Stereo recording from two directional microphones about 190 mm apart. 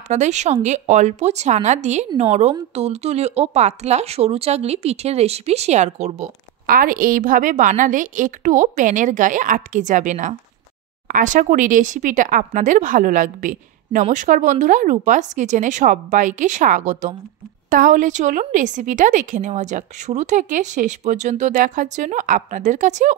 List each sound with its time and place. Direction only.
0.1 s speech: 35° right (ahead or behind)